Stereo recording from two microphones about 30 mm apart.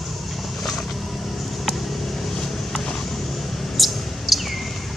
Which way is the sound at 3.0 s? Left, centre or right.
Centre.